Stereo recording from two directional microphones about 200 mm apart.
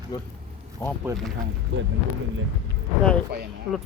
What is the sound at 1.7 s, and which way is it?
Speech, 60° right (ahead or behind).